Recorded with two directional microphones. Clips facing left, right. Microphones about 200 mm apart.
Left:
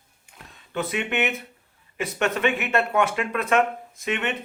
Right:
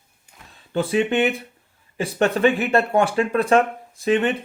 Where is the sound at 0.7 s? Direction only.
30° right (ahead or behind).